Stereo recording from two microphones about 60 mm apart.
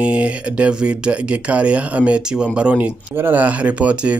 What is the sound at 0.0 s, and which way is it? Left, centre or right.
Speech, right.